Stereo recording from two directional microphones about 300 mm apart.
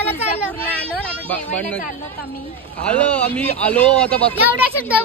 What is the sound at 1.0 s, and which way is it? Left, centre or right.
Speech, centre.